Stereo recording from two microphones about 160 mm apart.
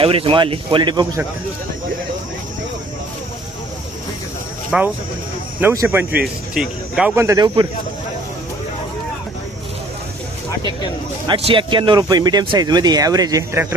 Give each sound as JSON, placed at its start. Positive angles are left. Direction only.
{"t": 0.0, "sound": "speech", "side_deg": -35}
{"t": 4.7, "sound": "speech", "side_deg": -5}
{"t": 5.5, "sound": "speech", "side_deg": -15}
{"t": 7.2, "sound": "speech", "side_deg": -20}
{"t": 11.3, "sound": "speech", "side_deg": -30}